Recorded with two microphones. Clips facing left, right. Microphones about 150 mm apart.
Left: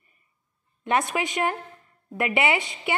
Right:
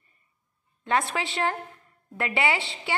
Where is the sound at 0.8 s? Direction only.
20° left (ahead or behind).